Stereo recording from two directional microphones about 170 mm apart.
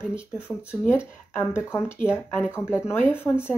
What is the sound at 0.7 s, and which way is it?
Speech, 15° left (ahead or behind).